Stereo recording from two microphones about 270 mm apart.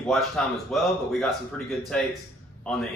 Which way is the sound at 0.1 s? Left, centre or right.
Centre.